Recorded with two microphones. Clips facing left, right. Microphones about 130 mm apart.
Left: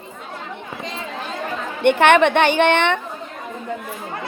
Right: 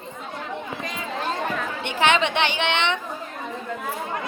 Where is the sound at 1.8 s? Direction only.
55° left (ahead or behind).